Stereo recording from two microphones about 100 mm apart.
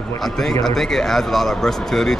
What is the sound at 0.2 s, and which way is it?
A man's voice, 5° left (ahead or behind).